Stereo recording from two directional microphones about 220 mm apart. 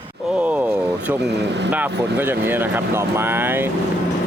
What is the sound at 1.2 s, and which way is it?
Speech, 50° right (ahead or behind).